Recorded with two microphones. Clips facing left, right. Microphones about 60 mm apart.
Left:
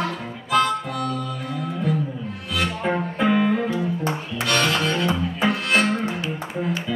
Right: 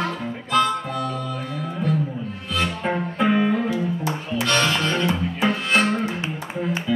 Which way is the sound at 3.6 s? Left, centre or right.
Left.